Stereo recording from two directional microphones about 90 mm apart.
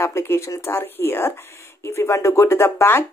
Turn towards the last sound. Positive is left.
turn(degrees=25)  # may be behind; listen again after turning